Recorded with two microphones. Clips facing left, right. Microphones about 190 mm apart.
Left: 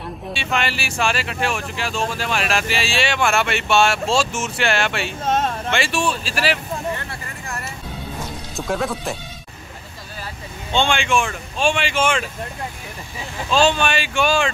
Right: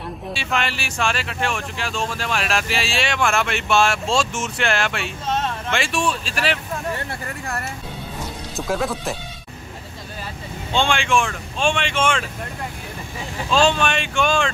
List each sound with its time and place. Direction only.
0.3 s speech: centre (ahead or behind)
5.2 s a sound: 50° left (ahead or behind)
5.7 s speech: centre (ahead or behind)
8.5 s speech: centre (ahead or behind)
10.7 s speech: centre (ahead or behind)
13.5 s speech: centre (ahead or behind)